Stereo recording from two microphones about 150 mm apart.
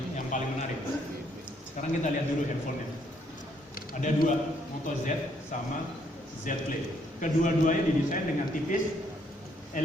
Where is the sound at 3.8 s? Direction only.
65° left (ahead or behind).